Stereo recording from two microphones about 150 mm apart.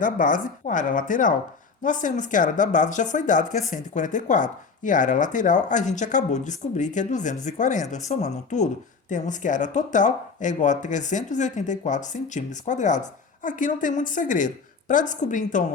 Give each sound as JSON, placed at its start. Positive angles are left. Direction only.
{"t": 0.0, "sound": "speech", "side_deg": 60}